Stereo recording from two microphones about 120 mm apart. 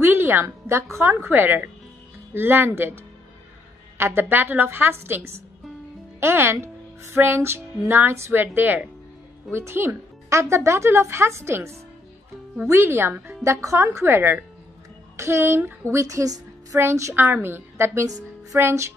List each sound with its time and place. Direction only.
0.0 s a woman's voice: 20° right (ahead or behind)
4.0 s a woman's voice: 20° right (ahead or behind)